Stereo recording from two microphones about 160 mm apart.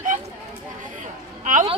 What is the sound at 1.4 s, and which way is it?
Speech, 55° right (ahead or behind).